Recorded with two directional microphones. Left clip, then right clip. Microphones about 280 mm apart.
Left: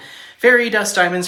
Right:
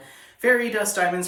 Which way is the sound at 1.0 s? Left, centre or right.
Centre.